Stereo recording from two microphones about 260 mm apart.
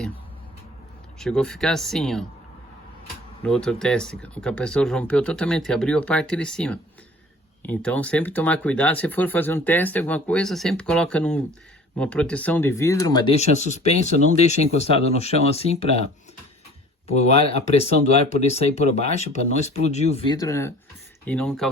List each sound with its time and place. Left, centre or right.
1.2 s speech: centre
3.4 s speech: centre; by 16.0 s left
17.1 s speech: left; by 21.7 s centre